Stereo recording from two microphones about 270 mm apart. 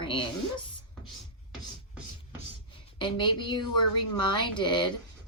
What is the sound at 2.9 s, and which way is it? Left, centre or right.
A woman's voice, centre.